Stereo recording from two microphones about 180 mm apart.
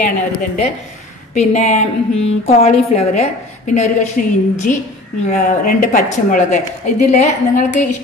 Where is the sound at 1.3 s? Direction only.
40° left (ahead or behind).